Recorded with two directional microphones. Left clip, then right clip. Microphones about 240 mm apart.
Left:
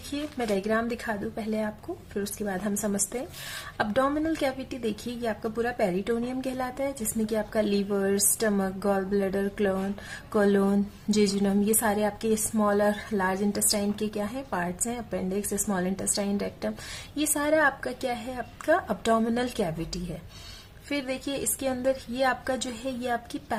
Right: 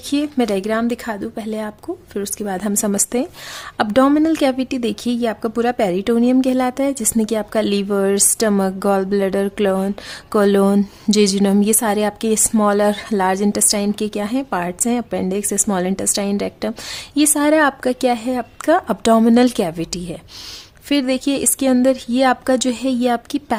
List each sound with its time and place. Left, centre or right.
0.1 s a woman's voice: right
20.9 s a woman's voice: right